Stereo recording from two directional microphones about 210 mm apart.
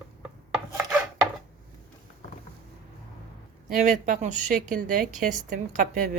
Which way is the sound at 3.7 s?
35° right (ahead or behind).